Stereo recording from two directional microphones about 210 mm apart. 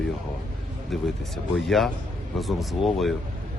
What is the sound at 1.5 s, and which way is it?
Speech, centre (ahead or behind).